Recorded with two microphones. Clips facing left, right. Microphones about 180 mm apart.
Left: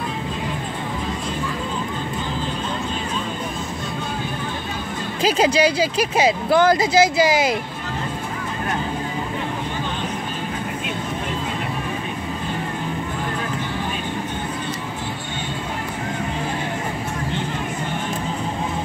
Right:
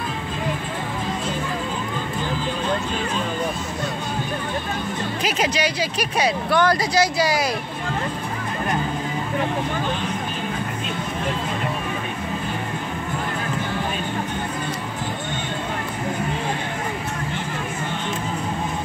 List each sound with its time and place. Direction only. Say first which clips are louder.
5.2 s speech: left 7 dB; 30° left (ahead or behind)